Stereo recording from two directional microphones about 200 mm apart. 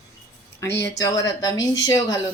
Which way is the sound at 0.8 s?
15° left (ahead or behind).